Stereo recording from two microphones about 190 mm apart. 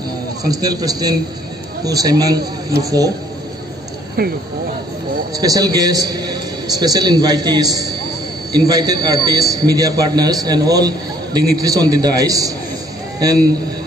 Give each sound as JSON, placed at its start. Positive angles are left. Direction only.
{"t": 0.5, "sound": "a man's voice", "side_deg": -20}
{"t": 4.2, "sound": "speech", "side_deg": -50}
{"t": 5.3, "sound": "a man's voice", "side_deg": -20}